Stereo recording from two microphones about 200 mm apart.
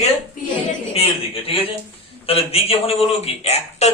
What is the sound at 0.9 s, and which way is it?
A man's voice, 25° left (ahead or behind).